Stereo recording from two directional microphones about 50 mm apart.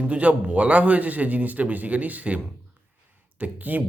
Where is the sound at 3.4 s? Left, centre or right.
Right.